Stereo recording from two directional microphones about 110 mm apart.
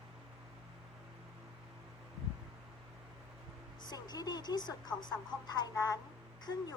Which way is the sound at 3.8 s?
40° left (ahead or behind).